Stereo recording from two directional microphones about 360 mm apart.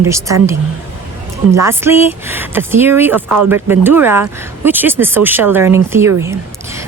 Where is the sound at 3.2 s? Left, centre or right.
Right.